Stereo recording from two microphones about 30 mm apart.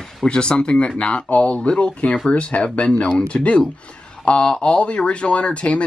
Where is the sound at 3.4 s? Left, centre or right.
Left.